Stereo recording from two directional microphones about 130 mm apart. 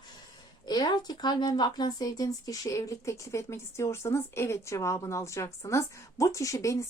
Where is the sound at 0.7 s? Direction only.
30° left (ahead or behind).